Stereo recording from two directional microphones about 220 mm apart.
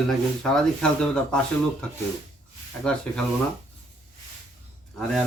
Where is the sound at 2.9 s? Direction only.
5° left (ahead or behind).